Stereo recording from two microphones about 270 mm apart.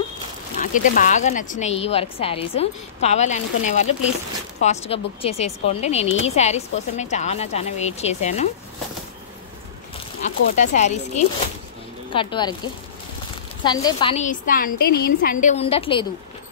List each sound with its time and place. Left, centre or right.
0.6 s speech: left
10.2 s speech: left
12.1 s speech: centre
13.7 s speech: centre